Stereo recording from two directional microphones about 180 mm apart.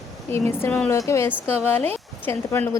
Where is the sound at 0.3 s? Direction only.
15° left (ahead or behind).